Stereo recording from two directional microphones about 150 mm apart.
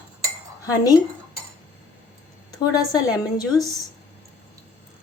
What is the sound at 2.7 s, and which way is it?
A woman's voice, 25° left (ahead or behind).